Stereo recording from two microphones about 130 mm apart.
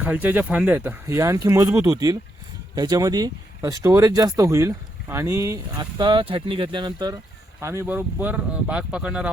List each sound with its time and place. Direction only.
0.0 s speech: 10° right (ahead or behind); by 7.2 s 35° right (ahead or behind)
7.6 s speech: 20° right (ahead or behind)